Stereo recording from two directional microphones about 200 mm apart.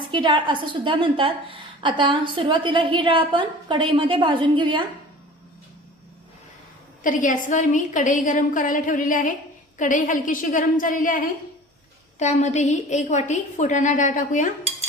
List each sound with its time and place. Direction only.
0.1 s a woman's voice: 25° right (ahead or behind)
7.0 s a woman's voice: 40° left (ahead or behind)